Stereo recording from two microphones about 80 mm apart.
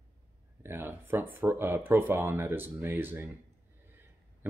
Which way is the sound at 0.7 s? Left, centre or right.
Right.